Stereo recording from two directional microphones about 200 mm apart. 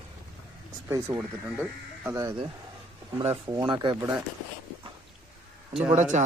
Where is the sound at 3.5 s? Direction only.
20° right (ahead or behind).